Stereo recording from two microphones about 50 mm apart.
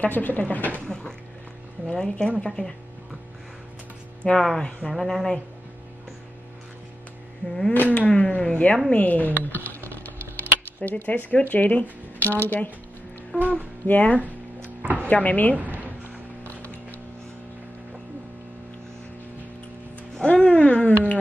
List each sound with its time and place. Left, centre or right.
0.1 s speech: left
0.8 s speech: centre
4.2 s speech: centre
7.4 s speech: centre
7.9 s speech: left
8.9 s typing: left
11.0 s speech: left
13.3 s speech: left
14.8 s a sound: right
15.0 s speech: left
20.2 s a sound: left